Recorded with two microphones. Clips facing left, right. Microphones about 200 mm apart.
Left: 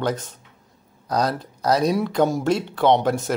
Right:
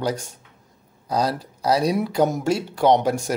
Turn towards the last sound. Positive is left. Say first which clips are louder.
# even
turn(degrees=-10)  # may be behind; listen again after turning